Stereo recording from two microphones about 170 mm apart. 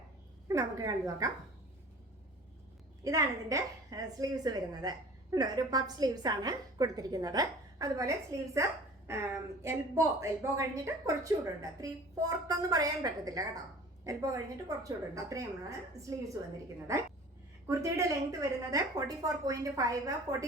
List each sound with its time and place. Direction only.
0.4 s a woman's voice: 20° right (ahead or behind)
3.0 s a woman's voice: 20° right (ahead or behind)
16.9 s a woman's voice: 15° right (ahead or behind)